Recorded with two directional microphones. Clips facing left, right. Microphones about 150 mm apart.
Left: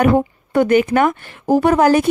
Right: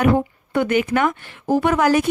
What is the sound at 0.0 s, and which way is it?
A woman's voice, 45° left (ahead or behind).